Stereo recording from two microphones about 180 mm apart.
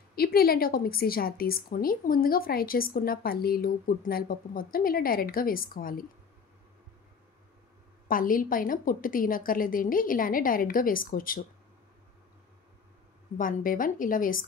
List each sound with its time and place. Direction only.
0.1 s a woman's voice: 55° left (ahead or behind)
8.1 s a woman's voice: 50° left (ahead or behind)
13.4 s a woman's voice: 50° left (ahead or behind)